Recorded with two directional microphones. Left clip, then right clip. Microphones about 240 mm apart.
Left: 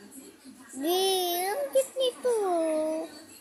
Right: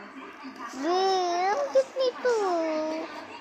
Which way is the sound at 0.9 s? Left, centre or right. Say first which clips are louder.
Right 2 dB; left.